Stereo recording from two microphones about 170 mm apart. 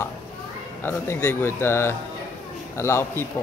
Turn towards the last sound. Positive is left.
turn(degrees=15)  # may be behind; listen again after turning